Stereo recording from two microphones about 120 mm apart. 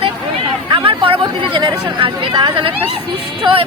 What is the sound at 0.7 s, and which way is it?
Speech, 45° right (ahead or behind).